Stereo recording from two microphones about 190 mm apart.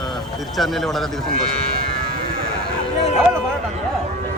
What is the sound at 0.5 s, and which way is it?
Speech, centre (ahead or behind).